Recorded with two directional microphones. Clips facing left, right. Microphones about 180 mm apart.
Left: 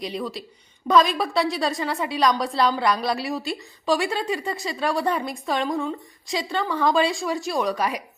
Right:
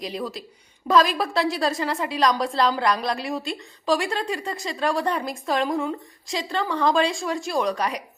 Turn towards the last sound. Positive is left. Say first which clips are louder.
# even
turn(degrees=5)  # may be behind; listen again after turning